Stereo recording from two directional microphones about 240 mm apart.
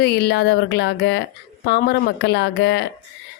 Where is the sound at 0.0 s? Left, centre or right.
Left.